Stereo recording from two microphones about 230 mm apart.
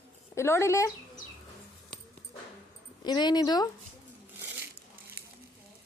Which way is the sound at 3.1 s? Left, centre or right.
Centre.